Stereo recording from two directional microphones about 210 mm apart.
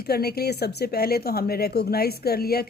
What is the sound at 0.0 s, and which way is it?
Speech, 50° left (ahead or behind).